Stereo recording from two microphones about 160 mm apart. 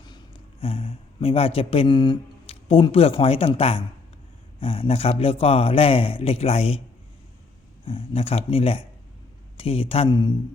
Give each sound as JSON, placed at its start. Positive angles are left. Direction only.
{"t": 0.0, "sound": "a man's voice", "side_deg": 30}
{"t": 7.9, "sound": "a man's voice", "side_deg": 35}